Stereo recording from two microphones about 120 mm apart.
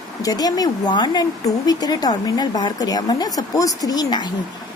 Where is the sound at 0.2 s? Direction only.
30° left (ahead or behind).